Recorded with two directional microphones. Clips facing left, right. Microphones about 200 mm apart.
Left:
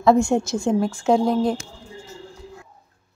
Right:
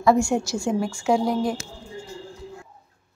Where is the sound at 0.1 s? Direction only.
20° left (ahead or behind).